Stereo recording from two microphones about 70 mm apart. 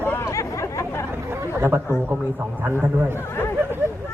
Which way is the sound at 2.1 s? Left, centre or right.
Right.